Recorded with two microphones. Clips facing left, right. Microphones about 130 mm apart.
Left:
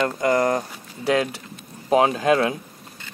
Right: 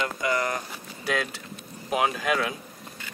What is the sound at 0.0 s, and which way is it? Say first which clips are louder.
Speech: left 7 dB; 45° left (ahead or behind).